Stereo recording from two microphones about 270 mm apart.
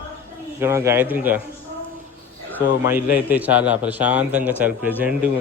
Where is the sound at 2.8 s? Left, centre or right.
Centre.